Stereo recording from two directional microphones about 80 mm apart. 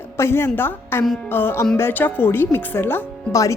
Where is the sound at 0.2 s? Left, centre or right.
Left.